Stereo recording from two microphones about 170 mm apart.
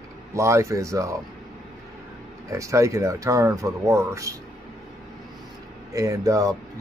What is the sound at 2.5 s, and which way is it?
Speech, 20° right (ahead or behind).